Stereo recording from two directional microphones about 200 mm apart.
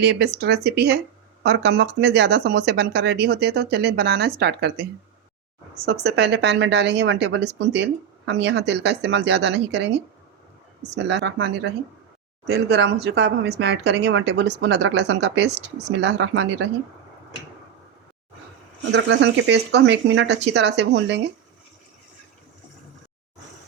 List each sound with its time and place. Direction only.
0.0 s speech: 55° right (ahead or behind)
18.9 s speech: 65° right (ahead or behind)